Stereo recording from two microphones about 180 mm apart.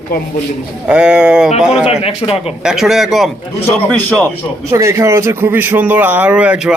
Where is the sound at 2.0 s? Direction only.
35° left (ahead or behind).